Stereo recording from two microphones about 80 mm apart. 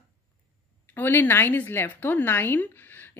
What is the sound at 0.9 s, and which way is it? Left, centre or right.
Speech, left.